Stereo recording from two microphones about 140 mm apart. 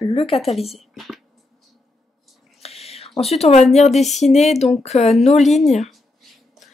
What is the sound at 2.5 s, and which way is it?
Whispering, 45° left (ahead or behind).